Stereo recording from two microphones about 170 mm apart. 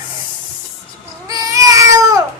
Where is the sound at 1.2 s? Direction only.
20° right (ahead or behind).